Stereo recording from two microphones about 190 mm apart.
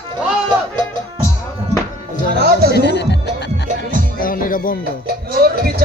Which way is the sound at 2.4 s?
55° right (ahead or behind).